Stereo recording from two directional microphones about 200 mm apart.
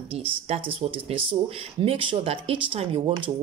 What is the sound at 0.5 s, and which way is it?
Speech, 30° right (ahead or behind).